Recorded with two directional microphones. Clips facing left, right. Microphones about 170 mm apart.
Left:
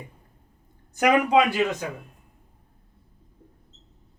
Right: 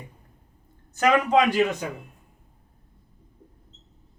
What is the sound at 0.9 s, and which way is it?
Speech, 15° left (ahead or behind).